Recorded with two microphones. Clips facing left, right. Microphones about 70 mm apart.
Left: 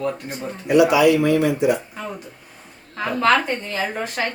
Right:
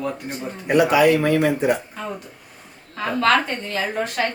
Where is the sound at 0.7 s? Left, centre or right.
Right.